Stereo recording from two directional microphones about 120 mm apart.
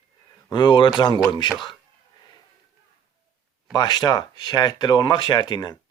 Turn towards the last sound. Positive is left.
turn(degrees=35)  # may be behind; listen again after turning